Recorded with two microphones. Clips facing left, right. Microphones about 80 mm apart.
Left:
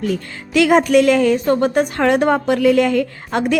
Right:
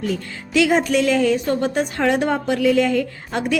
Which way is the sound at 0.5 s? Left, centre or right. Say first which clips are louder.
Left 5 dB; left.